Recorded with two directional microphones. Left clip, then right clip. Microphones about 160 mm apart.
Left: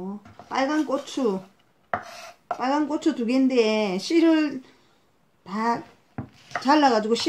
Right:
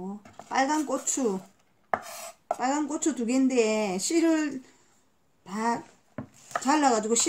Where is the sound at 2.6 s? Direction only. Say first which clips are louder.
Left 5 dB; 5° right (ahead or behind).